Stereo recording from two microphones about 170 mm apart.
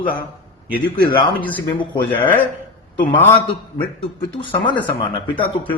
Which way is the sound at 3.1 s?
15° left (ahead or behind).